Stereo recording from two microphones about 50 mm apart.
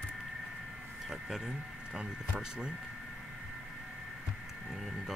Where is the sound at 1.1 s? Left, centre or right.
Centre.